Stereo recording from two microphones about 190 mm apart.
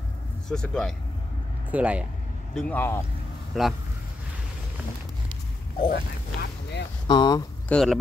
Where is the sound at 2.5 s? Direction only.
5° left (ahead or behind).